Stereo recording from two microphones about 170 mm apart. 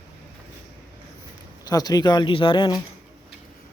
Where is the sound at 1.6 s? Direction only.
20° left (ahead or behind).